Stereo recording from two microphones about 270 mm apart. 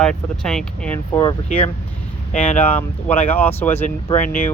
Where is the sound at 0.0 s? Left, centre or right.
Centre.